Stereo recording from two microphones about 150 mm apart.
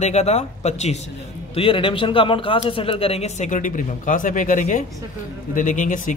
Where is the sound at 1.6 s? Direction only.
35° left (ahead or behind).